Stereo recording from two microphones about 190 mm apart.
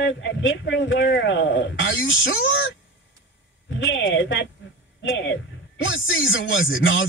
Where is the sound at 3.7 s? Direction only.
80° left.